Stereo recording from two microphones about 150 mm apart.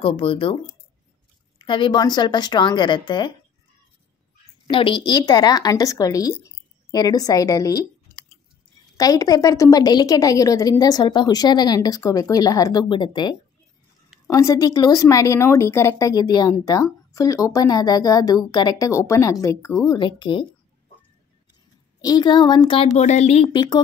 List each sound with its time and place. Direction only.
0.0 s speech: 35° left (ahead or behind)
1.6 s a woman's voice: 30° left (ahead or behind)
4.6 s a woman's voice: 35° left (ahead or behind)
22.0 s a woman's voice: 25° left (ahead or behind)
22.9 s speech: 50° left (ahead or behind)
23.5 s a woman's voice: 30° left (ahead or behind)